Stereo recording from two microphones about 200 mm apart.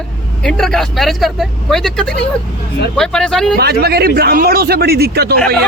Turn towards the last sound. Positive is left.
turn(degrees=-50)  # may be behind; listen again after turning